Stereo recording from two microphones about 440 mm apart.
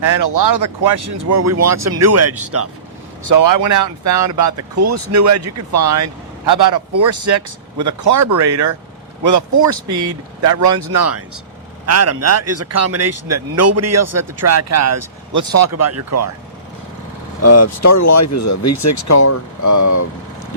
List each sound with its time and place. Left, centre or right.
0.2 s speech: right
3.2 s speech: right
17.4 s speech: left